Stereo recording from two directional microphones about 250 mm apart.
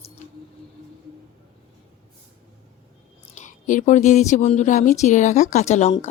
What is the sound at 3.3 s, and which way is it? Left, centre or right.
Speech, left.